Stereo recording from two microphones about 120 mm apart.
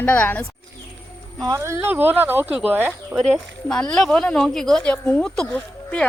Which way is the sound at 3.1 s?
5° left (ahead or behind).